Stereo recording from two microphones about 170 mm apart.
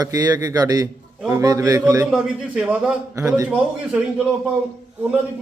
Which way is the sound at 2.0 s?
5° right (ahead or behind).